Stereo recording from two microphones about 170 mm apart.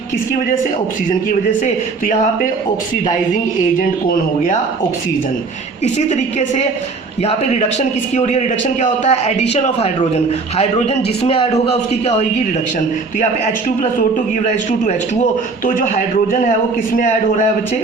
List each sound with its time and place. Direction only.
1.3 s a man's voice: 50° left (ahead or behind)
3.8 s a man's voice: 50° left (ahead or behind)
7.2 s a man's voice: 40° left (ahead or behind)
14.4 s a man's voice: 45° left (ahead or behind)